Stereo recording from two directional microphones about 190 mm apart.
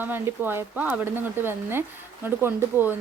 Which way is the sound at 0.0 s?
10° right (ahead or behind).